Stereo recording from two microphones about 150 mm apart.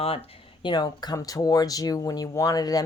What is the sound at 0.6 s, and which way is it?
Speech, 30° left (ahead or behind).